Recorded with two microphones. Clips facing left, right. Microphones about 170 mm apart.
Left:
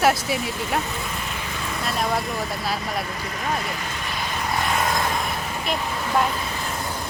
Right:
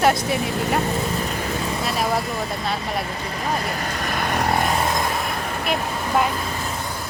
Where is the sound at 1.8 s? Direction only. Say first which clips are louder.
Even; 5° right (ahead or behind).